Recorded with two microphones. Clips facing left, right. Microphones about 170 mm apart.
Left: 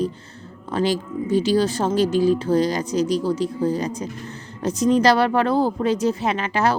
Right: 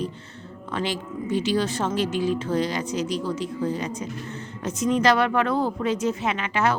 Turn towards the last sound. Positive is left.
turn(degrees=35)  # may be behind; listen again after turning